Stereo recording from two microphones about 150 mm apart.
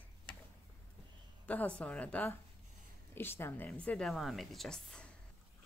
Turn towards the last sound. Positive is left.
turn(degrees=5)  # may be behind; listen again after turning